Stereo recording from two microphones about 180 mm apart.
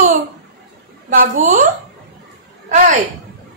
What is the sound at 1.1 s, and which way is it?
Speech, 50° right (ahead or behind).